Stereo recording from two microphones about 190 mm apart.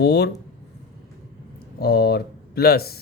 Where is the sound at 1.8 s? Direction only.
60° left (ahead or behind).